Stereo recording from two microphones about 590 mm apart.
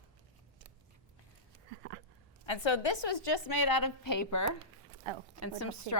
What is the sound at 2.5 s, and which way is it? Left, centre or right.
A woman's voice, left.